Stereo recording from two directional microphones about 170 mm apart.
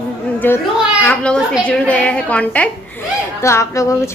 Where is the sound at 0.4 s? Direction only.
10° left (ahead or behind).